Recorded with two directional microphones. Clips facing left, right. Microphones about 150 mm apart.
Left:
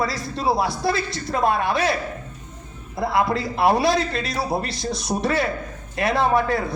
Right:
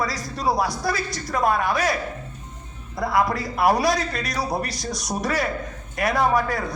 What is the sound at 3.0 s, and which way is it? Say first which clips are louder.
A man's voice: left 1 dB; 25° left (ahead or behind).